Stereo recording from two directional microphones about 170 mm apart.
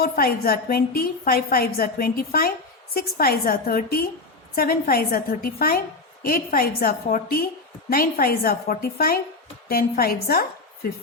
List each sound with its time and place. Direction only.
0.0 s a woman's voice: 60° left (ahead or behind)